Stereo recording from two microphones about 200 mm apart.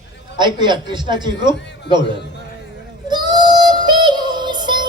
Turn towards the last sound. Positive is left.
turn(degrees=-20)  # may be behind; listen again after turning